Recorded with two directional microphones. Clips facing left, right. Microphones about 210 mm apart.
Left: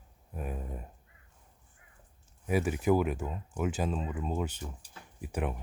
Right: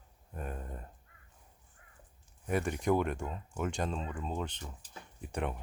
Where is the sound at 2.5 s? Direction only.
5° left (ahead or behind).